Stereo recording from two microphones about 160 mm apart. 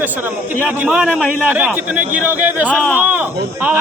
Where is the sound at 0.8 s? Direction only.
5° right (ahead or behind).